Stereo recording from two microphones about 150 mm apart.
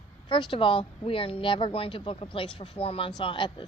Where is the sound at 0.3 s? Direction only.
30° left (ahead or behind).